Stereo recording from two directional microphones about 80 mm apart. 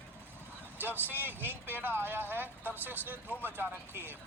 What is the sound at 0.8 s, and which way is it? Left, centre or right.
Speech, right.